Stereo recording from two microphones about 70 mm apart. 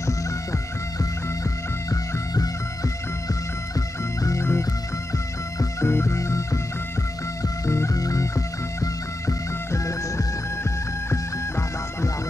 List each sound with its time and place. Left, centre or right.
1.9 s music: left
5.6 s music: left